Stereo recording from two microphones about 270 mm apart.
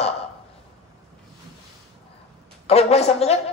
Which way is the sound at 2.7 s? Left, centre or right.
Left.